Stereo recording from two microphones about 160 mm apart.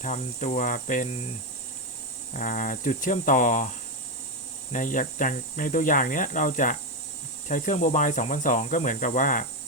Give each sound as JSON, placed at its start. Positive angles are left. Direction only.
{"t": 0.0, "sound": "speech", "side_deg": 50}
{"t": 2.3, "sound": "speech", "side_deg": 55}
{"t": 4.7, "sound": "speech", "side_deg": 55}